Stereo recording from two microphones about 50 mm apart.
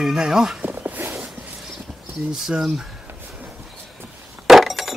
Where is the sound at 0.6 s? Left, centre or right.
Right.